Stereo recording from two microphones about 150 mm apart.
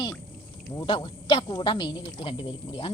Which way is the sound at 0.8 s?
35° left (ahead or behind).